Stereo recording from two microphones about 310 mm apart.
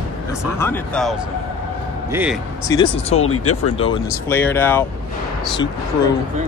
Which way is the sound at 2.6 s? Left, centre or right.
Centre.